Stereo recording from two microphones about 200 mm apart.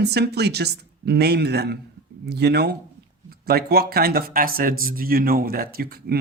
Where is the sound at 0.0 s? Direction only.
55° right (ahead or behind).